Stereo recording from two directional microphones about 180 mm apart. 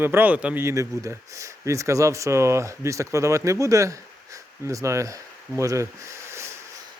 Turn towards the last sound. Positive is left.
turn(degrees=-15)  # may be behind; listen again after turning